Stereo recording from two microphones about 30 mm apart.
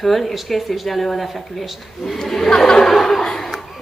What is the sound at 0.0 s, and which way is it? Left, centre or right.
A woman's voice, centre.